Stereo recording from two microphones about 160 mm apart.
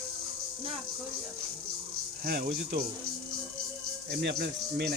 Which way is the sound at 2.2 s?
70° right (ahead or behind).